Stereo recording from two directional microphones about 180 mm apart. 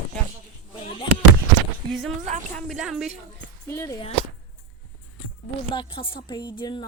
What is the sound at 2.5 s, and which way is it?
Speech, centre (ahead or behind).